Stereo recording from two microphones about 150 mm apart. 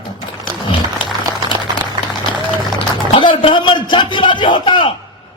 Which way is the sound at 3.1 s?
35° left (ahead or behind).